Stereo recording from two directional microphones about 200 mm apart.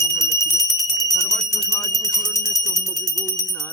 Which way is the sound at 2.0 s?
15° left (ahead or behind).